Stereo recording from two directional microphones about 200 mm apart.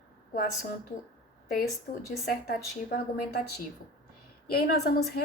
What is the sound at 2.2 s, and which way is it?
A woman's voice, 50° left (ahead or behind).